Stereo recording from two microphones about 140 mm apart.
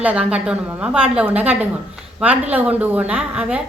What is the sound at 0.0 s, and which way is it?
A woman's voice, 10° right (ahead or behind).